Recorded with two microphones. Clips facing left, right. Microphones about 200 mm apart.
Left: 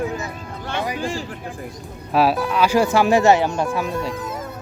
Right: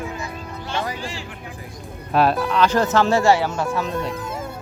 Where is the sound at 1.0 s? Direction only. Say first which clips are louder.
Left 6 dB; 50° left (ahead or behind).